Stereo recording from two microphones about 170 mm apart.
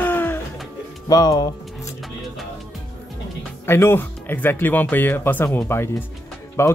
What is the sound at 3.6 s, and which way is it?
Speech, 15° left (ahead or behind).